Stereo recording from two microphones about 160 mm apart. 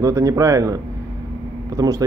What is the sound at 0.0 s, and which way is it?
Speech, 20° right (ahead or behind).